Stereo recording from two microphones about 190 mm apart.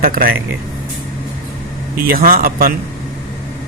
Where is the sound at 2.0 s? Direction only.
50° right (ahead or behind).